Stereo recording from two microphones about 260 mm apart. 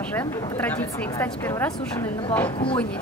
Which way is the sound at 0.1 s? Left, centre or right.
Centre.